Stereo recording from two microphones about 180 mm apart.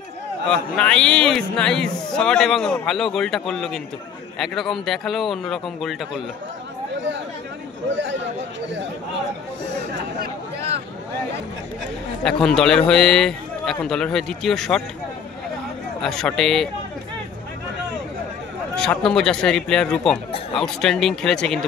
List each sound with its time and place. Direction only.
0.5 s speech: 5° left (ahead or behind)
7.9 s a man's voice: 90° right
12.2 s speech: 5° left (ahead or behind)
16.0 s speech: 5° left (ahead or behind)
18.8 s speech: 5° left (ahead or behind)